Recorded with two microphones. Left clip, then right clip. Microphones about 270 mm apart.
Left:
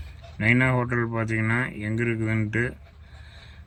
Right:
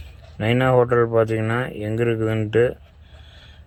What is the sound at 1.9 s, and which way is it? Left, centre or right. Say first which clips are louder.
Speech: right 7 dB; right.